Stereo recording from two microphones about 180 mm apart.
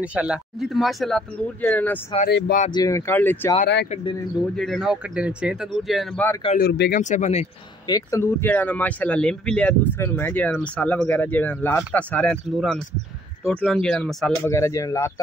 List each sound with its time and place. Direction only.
0.0 s speech: 5° right (ahead or behind); by 2.0 s 10° left (ahead or behind)
2.2 s speech: 60° left (ahead or behind)
2.7 s speech: 20° left (ahead or behind)
4.6 s speech: centre (ahead or behind)
6.5 s speech: 60° left (ahead or behind)
7.0 s speech: 40° left (ahead or behind)
7.8 s speech: 20° left (ahead or behind)